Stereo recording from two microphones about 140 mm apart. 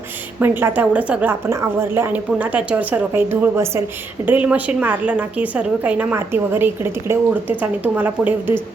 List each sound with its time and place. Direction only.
0.3 s a woman's voice: 15° right (ahead or behind)